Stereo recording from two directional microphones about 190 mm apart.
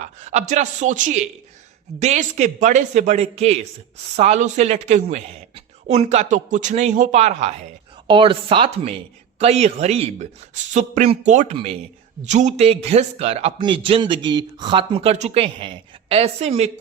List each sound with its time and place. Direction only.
0.0 s a man's voice: 35° right (ahead or behind)